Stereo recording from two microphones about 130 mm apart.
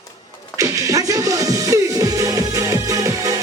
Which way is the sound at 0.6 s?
25° right (ahead or behind).